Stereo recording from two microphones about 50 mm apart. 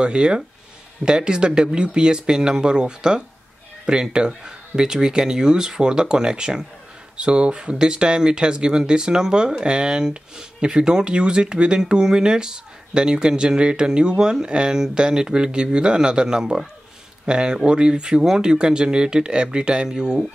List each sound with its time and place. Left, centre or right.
0.0 s speech: centre